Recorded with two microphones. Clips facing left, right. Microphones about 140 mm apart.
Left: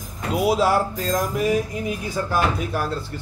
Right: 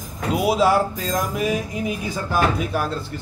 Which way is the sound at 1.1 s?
15° right (ahead or behind).